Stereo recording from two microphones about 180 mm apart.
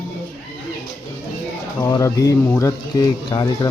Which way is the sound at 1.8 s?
20° left (ahead or behind).